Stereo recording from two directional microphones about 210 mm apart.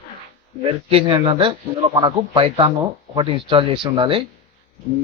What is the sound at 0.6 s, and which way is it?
Speech, 25° right (ahead or behind).